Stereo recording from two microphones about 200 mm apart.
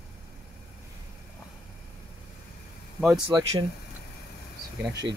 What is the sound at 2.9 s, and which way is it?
Speech, centre (ahead or behind).